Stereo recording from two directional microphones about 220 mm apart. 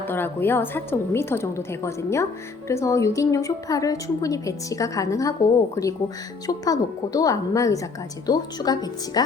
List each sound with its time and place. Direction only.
0.0 s a woman's voice: 10° left (ahead or behind)